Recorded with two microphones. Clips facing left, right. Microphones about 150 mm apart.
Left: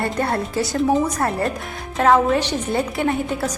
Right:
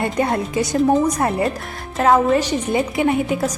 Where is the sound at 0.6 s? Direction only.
Centre (ahead or behind).